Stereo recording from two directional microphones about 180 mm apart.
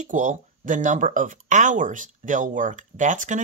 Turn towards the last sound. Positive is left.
turn(degrees=-45)  # may be behind; listen again after turning